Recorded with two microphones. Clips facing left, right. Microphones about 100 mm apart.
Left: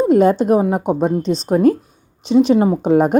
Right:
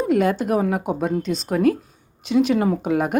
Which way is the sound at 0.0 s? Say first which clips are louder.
Left 7 dB; 30° left (ahead or behind).